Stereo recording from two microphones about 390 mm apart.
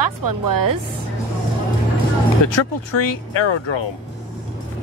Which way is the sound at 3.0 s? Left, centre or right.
Left.